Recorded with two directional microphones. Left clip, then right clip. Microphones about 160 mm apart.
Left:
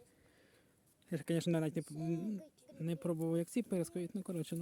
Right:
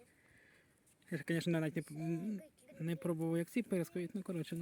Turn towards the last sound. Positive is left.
turn(degrees=15)  # may be behind; listen again after turning